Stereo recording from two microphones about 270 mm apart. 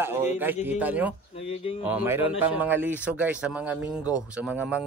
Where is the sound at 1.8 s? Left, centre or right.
Centre.